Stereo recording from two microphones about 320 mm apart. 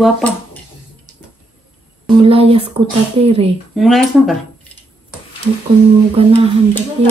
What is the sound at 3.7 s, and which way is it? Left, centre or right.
Speech, centre.